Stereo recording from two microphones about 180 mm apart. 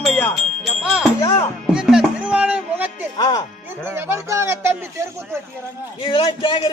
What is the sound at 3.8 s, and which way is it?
Speech, 15° right (ahead or behind).